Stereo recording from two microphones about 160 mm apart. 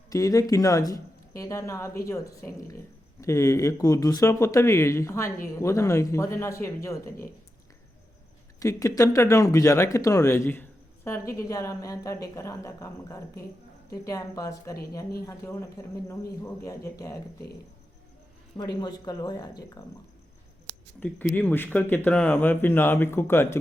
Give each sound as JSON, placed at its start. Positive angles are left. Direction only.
{"t": 0.1, "sound": "speech", "side_deg": 20}
{"t": 8.5, "sound": "speech", "side_deg": 20}
{"t": 18.5, "sound": "speech", "side_deg": 25}
{"t": 21.0, "sound": "speech", "side_deg": 10}